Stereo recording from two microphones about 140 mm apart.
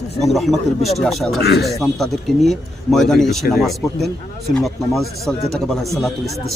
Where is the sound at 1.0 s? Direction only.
Centre (ahead or behind).